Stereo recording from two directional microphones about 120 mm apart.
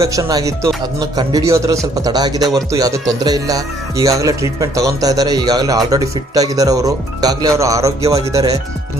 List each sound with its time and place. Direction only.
0.0 s speech: 30° right (ahead or behind)